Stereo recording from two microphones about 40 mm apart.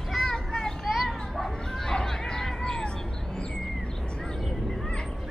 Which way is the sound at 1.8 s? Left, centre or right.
Centre.